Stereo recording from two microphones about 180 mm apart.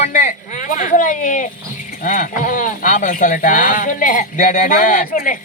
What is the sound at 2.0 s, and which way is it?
Speech, 45° left (ahead or behind).